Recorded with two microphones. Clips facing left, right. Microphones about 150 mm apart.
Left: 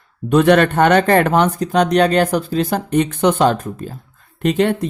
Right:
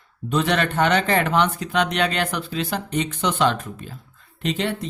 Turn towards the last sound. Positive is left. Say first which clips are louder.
# left 9 dB
turn(degrees=50)  # may be behind; listen again after turning